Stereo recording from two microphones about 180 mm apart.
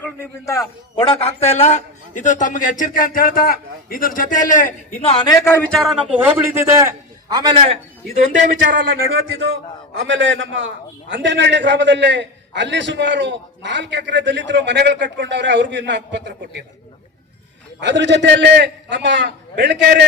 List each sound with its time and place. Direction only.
0.0 s a man's voice: 15° left (ahead or behind)
0.9 s a man's voice: 30° left (ahead or behind); by 7.8 s 25° right (ahead or behind)
8.1 s a man's voice: 40° right (ahead or behind)
10.1 s a man's voice: 90° right; by 16.6 s 75° right (ahead or behind)
17.7 s a man's voice: 75° right (ahead or behind)